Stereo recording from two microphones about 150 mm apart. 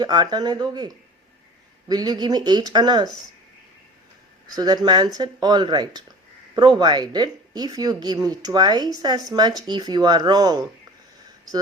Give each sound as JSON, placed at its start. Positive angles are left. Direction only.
{"t": 0.0, "sound": "a woman's voice", "side_deg": -30}
{"t": 4.4, "sound": "a woman's voice", "side_deg": -25}